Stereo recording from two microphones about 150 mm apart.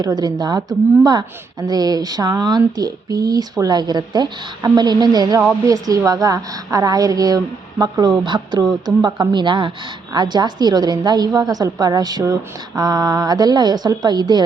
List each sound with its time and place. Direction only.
0.0 s a woman's voice: 25° right (ahead or behind)